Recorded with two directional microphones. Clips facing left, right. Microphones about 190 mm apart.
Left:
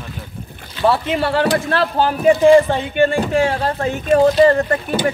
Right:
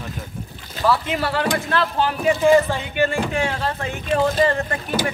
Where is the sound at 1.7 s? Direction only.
40° left (ahead or behind).